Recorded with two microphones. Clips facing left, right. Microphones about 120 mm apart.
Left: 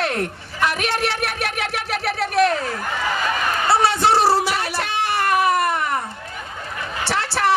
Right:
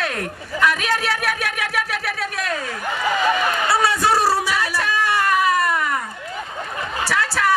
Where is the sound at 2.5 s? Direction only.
35° left (ahead or behind).